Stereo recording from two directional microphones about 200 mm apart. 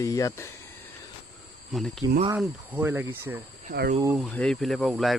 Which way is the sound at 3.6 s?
50° right (ahead or behind).